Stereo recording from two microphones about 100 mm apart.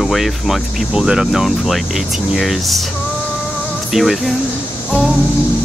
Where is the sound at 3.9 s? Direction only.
Centre (ahead or behind).